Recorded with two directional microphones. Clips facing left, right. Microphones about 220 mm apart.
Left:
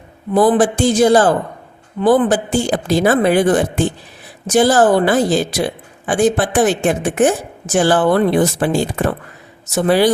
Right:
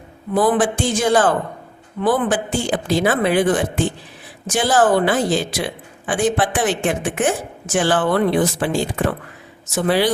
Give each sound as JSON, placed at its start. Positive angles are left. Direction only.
{"t": 0.3, "sound": "a woman's voice", "side_deg": 35}